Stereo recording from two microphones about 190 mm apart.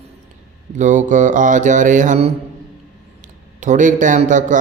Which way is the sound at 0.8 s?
40° right (ahead or behind).